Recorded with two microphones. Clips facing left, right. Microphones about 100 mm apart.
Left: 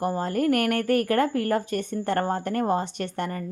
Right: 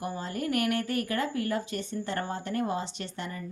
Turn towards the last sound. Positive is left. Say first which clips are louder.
# left 8 dB
turn(degrees=55)  # may be behind; listen again after turning